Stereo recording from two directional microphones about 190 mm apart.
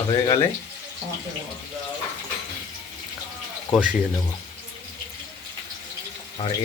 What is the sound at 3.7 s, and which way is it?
Speech, 5° right (ahead or behind).